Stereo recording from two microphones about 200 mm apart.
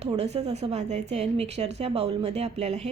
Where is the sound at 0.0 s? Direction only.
30° right (ahead or behind).